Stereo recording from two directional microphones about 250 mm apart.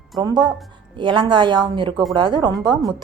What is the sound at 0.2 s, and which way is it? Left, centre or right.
A woman's voice, centre.